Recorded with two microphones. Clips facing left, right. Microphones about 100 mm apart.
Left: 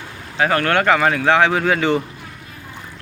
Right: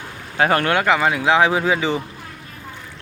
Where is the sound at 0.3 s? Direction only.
25° right (ahead or behind).